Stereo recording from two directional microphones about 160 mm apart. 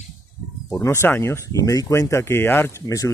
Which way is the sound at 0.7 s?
15° left (ahead or behind).